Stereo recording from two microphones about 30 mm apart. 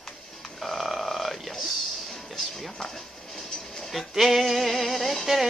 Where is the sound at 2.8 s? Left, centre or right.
Centre.